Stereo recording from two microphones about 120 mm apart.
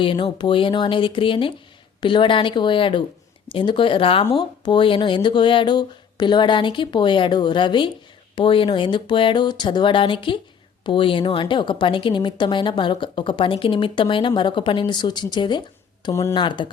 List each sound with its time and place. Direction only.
0.0 s a woman's voice: 45° left (ahead or behind)